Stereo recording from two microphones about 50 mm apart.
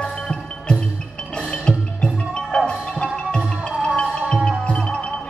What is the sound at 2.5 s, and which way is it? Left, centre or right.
Music, centre.